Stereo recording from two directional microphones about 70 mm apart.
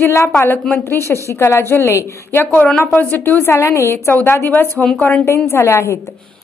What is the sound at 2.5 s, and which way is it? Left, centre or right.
A woman's voice, left.